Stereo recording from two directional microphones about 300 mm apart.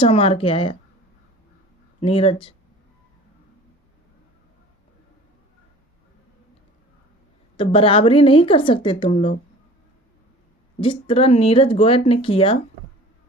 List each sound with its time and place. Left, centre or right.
0.0 s speech: centre
2.0 s speech: centre
7.5 s a woman's voice: centre
10.8 s speech: centre